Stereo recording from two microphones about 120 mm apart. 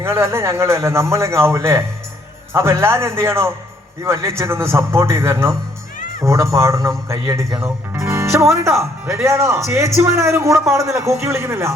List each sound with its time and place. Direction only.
0.0 s speech: 20° right (ahead or behind)